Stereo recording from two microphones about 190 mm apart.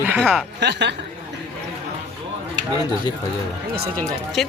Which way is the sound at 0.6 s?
65° right (ahead or behind).